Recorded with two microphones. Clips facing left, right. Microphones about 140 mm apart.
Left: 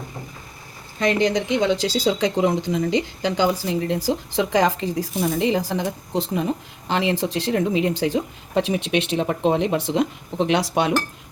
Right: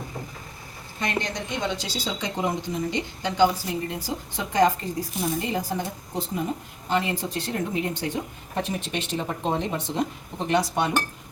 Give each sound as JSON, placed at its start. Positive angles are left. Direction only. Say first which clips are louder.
{"t": 0.9, "sound": "speech", "louder": "left 9 dB", "side_deg": 90}